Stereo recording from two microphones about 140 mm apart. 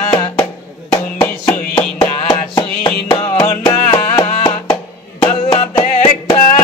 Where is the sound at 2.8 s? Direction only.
40° left (ahead or behind).